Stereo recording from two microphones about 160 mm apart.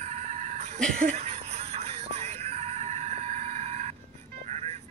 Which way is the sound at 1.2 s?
40° right (ahead or behind).